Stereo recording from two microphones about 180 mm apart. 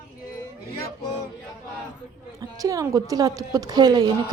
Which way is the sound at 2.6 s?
20° right (ahead or behind).